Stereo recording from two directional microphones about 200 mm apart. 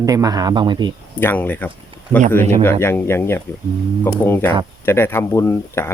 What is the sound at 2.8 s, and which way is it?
Speech, 10° left (ahead or behind).